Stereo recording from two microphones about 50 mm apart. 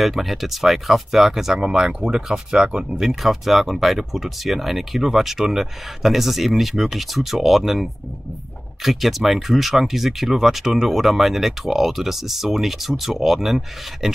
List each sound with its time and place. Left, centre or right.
0.0 s speech: centre